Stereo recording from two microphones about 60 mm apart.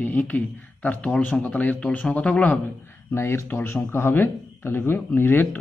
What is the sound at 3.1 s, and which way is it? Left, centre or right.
Speech, left.